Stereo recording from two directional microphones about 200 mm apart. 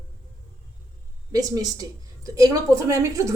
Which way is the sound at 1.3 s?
20° right (ahead or behind).